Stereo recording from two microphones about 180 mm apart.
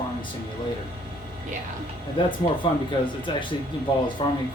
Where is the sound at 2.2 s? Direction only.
30° left (ahead or behind).